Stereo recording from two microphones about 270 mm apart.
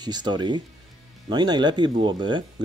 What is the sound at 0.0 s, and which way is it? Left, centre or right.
Speech, centre.